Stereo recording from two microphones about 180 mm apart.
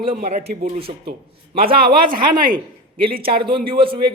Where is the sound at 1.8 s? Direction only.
55° right (ahead or behind).